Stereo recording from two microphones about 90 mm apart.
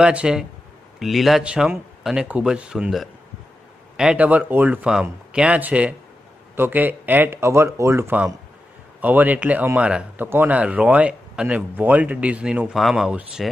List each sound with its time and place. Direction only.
0.0 s a man's voice: 10° right (ahead or behind); by 8.2 s 30° right (ahead or behind)
9.0 s speech: 20° right (ahead or behind)
12.7 s speech: 5° right (ahead or behind)